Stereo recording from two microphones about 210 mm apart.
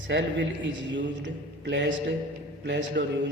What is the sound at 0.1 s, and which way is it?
A man's voice, 60° right (ahead or behind).